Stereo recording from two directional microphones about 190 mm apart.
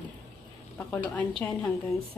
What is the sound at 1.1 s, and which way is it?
Speech, 5° left (ahead or behind).